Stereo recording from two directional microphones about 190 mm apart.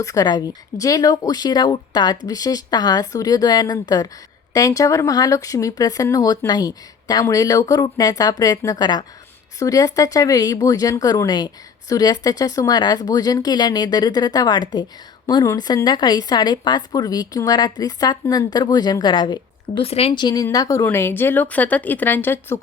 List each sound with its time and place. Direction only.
0.0 s speech: 20° left (ahead or behind)